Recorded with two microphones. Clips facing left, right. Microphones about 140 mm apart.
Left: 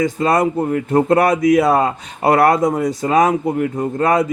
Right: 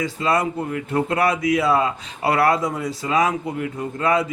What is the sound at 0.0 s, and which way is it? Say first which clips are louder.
Speech: left 6 dB; 45° left (ahead or behind).